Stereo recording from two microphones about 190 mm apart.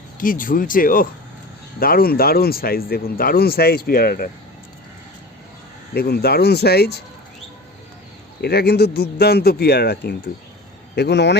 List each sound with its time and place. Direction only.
0.2 s speech: 45° left (ahead or behind)
5.9 s a man's voice: 55° left (ahead or behind)
8.4 s a man's voice: 55° left (ahead or behind)